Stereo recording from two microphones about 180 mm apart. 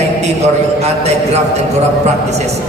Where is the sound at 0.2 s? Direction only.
40° right (ahead or behind).